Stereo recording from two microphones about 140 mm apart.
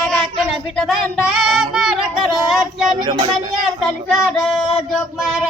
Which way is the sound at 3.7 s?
Centre (ahead or behind).